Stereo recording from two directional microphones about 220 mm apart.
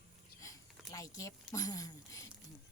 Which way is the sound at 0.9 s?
15° left (ahead or behind).